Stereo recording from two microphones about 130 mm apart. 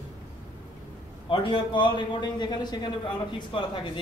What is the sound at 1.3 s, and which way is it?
A man's voice, 40° left (ahead or behind).